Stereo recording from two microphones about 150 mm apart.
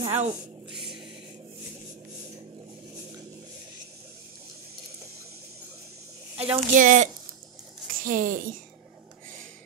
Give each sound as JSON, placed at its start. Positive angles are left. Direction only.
{"t": 0.0, "sound": "speech", "side_deg": -40}
{"t": 6.3, "sound": "speech", "side_deg": -10}
{"t": 6.7, "sound": "speech", "side_deg": -60}